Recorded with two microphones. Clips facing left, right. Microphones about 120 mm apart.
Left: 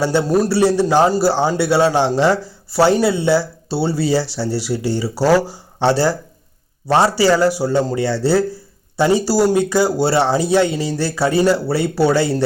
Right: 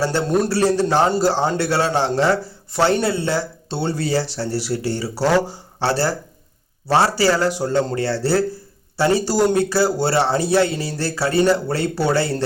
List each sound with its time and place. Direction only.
0.0 s a man's voice: 10° left (ahead or behind)